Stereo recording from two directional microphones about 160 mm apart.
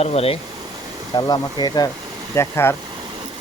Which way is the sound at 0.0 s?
40° left (ahead or behind).